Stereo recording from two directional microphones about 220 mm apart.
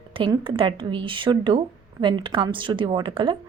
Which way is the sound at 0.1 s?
25° right (ahead or behind).